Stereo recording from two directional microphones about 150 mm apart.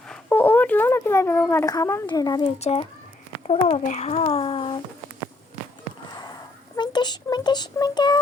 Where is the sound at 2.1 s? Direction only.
30° left (ahead or behind).